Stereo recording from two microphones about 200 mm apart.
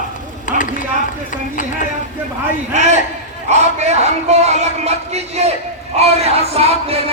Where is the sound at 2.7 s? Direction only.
35° right (ahead or behind).